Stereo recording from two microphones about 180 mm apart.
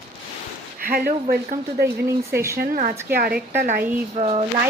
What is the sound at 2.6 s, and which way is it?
Speech, 55° right (ahead or behind).